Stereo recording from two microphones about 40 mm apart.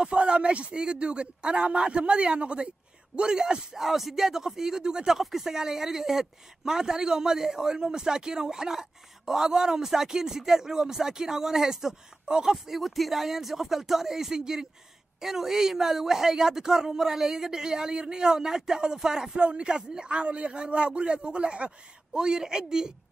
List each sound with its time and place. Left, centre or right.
0.0 s a man's voice: right
12.5 s a man's voice: centre